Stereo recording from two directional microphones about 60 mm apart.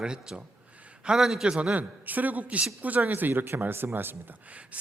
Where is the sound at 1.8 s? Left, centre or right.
Right.